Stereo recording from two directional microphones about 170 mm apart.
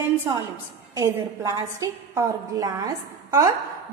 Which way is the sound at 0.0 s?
15° right (ahead or behind).